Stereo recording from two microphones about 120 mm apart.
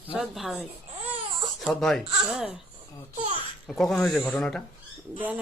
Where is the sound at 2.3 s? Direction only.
10° right (ahead or behind).